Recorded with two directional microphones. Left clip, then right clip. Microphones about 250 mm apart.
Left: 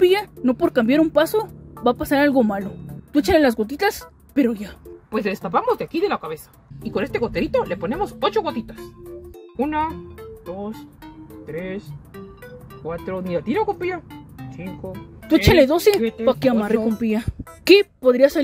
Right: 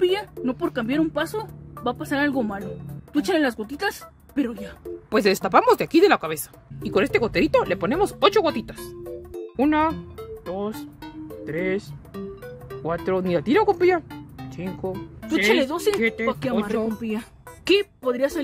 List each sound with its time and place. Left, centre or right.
0.0 s speech: centre
5.1 s speech: right
9.8 s music: centre
11.4 s speech: right
13.3 s speech: right
14.1 s music: centre
15.2 s speech: centre